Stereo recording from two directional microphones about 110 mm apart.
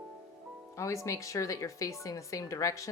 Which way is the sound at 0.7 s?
30° left (ahead or behind).